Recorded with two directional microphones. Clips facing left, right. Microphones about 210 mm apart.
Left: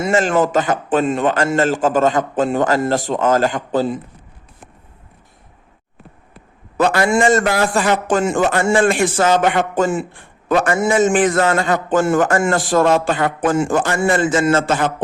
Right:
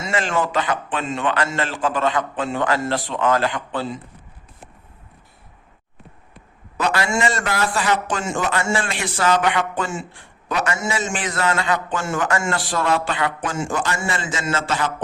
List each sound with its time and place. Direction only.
0.0 s a man's voice: 45° left (ahead or behind)
6.7 s a man's voice: 50° left (ahead or behind)